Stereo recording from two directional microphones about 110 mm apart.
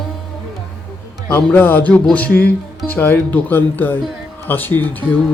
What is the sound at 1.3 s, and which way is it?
Speech, 20° left (ahead or behind).